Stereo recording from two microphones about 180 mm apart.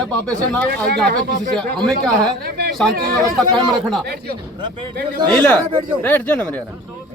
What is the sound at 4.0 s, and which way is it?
Speech, 60° right (ahead or behind).